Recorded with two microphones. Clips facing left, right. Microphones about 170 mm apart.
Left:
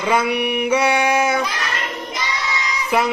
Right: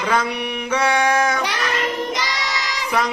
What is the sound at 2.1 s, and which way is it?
Child singing, 85° right.